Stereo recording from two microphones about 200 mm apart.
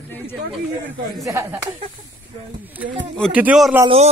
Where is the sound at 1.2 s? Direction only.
15° right (ahead or behind).